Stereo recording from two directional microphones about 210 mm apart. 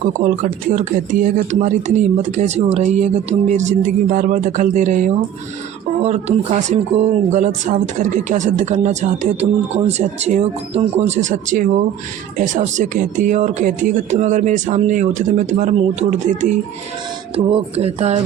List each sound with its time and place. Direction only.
0.8 s speech: 35° right (ahead or behind)